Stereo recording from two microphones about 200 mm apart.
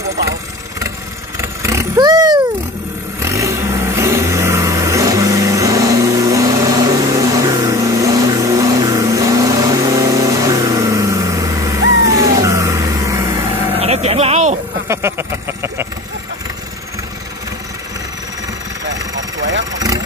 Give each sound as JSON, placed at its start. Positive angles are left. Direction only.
{"t": 1.4, "sound": "vehicle", "side_deg": -15}
{"t": 13.7, "sound": "a sound", "side_deg": -30}
{"t": 14.9, "sound": "vehicle", "side_deg": -10}